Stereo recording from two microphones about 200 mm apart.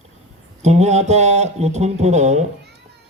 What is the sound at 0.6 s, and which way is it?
A man's voice, 35° right (ahead or behind).